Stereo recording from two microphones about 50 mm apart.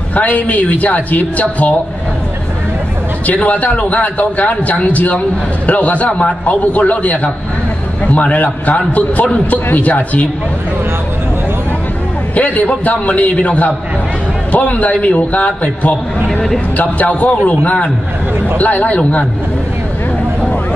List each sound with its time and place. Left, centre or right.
0.1 s a woman's voice: left
3.3 s a woman's voice: left
12.4 s a man's voice: left